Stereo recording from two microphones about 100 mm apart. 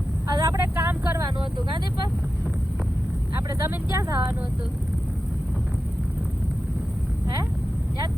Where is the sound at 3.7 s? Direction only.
30° right (ahead or behind).